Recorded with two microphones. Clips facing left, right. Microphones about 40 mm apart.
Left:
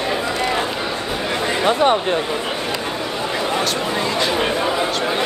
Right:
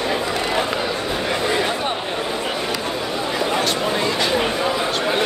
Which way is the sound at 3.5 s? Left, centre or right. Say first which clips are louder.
Even; centre.